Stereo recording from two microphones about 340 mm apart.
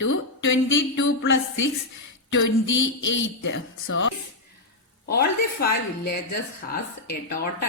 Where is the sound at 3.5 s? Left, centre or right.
Left.